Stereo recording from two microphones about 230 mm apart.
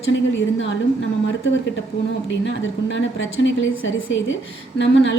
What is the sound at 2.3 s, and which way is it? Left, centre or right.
A woman's voice, left.